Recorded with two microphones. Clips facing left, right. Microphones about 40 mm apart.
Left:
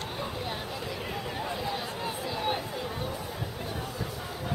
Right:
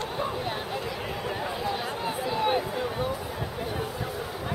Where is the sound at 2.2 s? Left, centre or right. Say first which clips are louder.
Right 6 dB; centre.